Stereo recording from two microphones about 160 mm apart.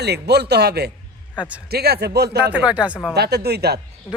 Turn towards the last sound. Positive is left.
turn(degrees=-90)